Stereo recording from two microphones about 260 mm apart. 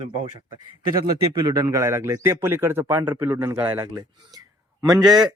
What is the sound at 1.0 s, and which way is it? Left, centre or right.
A man's voice, centre.